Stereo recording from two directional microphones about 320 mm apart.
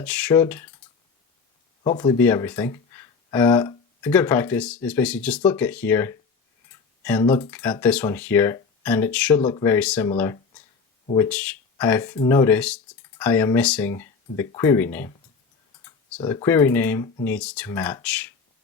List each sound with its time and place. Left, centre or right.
0.0 s speech: centre
1.8 s speech: centre